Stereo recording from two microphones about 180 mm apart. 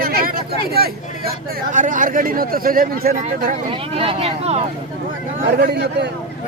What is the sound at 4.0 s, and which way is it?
Speech, 30° right (ahead or behind).